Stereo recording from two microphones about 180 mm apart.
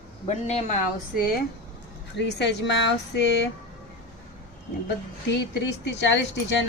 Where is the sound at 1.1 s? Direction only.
55° left (ahead or behind).